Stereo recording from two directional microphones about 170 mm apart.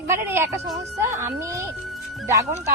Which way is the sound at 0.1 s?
15° right (ahead or behind).